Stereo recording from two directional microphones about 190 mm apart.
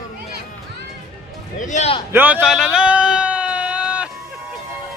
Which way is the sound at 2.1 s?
10° right (ahead or behind).